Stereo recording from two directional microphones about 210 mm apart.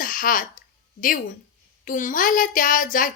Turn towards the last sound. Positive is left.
turn(degrees=40)  # may be behind; listen again after turning